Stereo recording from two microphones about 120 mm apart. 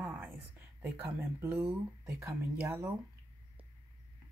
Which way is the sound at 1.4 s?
20° right (ahead or behind).